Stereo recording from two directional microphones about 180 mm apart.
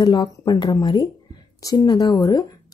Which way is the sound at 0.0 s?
20° left (ahead or behind).